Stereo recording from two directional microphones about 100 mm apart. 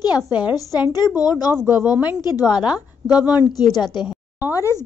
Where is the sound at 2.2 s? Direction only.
45° left (ahead or behind).